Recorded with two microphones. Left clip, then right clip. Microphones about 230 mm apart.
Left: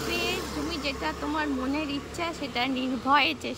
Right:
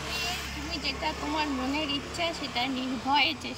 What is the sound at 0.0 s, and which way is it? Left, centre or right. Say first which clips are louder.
Vehicle: left 3 dB; left.